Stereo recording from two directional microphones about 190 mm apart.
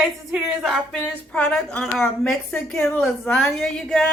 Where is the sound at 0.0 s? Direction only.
Centre (ahead or behind).